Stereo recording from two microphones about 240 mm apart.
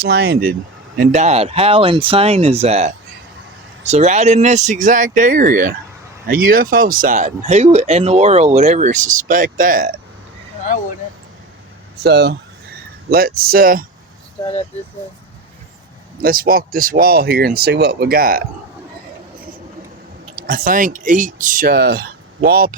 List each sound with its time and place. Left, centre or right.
0.0 s speech: right
0.9 s speech: right
11.9 s speech: right
16.1 s speech: right
20.3 s speech: right